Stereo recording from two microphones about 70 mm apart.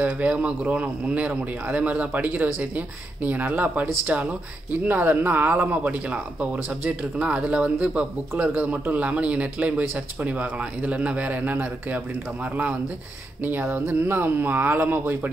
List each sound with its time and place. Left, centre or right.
0.0 s speech: centre
13.4 s speech: right